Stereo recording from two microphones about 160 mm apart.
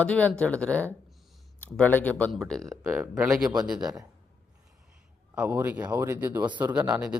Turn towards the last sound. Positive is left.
turn(degrees=-5)  # may be behind; listen again after turning